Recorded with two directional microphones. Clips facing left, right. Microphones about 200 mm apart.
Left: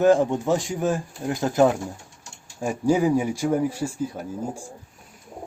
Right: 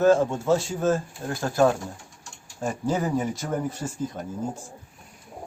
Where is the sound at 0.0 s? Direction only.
15° left (ahead or behind).